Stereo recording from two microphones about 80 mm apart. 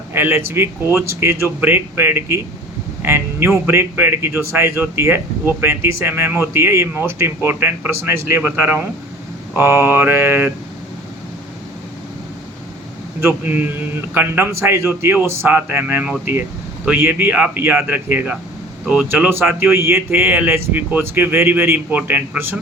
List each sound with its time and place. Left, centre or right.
0.1 s a man's voice: right
13.1 s a man's voice: right